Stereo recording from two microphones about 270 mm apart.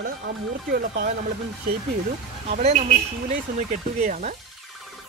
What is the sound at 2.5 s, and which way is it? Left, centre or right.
Speech, right.